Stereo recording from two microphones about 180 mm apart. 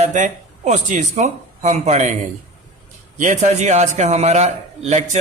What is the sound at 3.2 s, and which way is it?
A man's voice, 40° right (ahead or behind).